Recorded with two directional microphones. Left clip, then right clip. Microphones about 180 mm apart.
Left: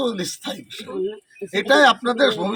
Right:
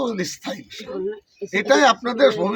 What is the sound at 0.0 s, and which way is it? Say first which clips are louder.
Speech: left 1 dB; 5° right (ahead or behind).